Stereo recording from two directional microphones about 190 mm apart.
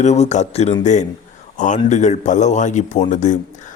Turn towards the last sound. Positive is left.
turn(degrees=40)  # may be behind; listen again after turning